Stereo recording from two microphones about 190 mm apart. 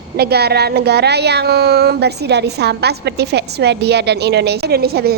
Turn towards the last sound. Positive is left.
turn(degrees=-55)  # may be behind; listen again after turning